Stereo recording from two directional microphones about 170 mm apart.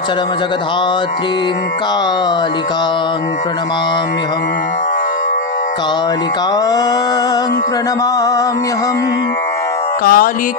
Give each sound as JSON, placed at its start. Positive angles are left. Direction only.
{"t": 10.0, "sound": "speech", "side_deg": 55}